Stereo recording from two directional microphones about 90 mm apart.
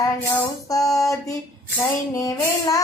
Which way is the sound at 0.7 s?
40° left (ahead or behind).